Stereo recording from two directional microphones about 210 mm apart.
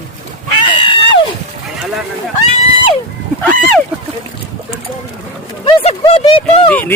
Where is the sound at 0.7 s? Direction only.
25° left (ahead or behind).